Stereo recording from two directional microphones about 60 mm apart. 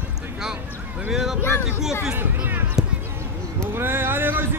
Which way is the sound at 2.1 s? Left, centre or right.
Right.